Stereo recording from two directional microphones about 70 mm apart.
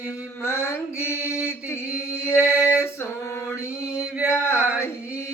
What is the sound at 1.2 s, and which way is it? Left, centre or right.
Mantra, centre.